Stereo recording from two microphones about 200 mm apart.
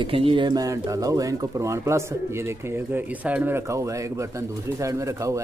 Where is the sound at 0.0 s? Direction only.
25° right (ahead or behind).